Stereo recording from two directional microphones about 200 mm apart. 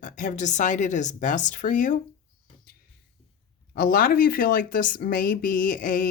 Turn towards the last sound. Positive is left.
turn(degrees=40)  # may be behind; listen again after turning